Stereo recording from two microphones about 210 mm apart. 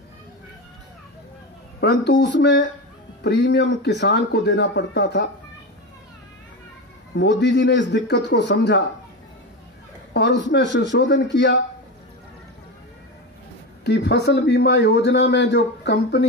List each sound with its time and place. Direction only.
1.8 s speech: 55° left (ahead or behind)
7.2 s speech: 55° left (ahead or behind)
10.5 s speech: 55° left (ahead or behind)
13.8 s a man's voice: 55° left (ahead or behind)